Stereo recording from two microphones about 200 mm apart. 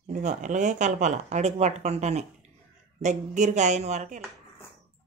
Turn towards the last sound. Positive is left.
turn(degrees=-35)  # may be behind; listen again after turning